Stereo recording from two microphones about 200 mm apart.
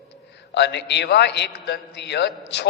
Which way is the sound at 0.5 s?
60° left (ahead or behind).